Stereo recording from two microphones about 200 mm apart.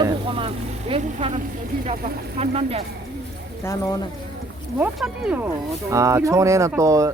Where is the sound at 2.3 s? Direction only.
30° right (ahead or behind).